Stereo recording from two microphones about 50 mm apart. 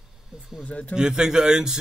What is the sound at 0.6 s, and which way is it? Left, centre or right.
Speech, left.